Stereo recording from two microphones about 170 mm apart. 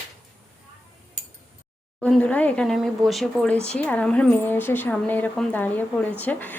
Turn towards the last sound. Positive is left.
turn(degrees=10)  # may be behind; listen again after turning